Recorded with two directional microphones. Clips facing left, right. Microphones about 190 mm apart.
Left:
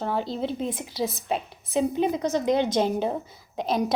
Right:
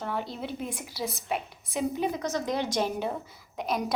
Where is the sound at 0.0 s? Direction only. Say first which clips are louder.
Left 6 dB; 30° left (ahead or behind).